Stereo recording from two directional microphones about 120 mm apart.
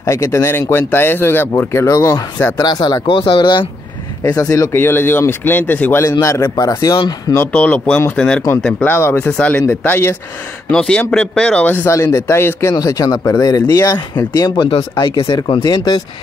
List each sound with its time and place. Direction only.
0.0 s speech: 25° left (ahead or behind); by 3.6 s 45° left (ahead or behind)
4.2 s speech: 30° left (ahead or behind)
7.3 s speech: 15° left (ahead or behind)
8.9 s speech: 20° left (ahead or behind); by 16.0 s 35° left (ahead or behind)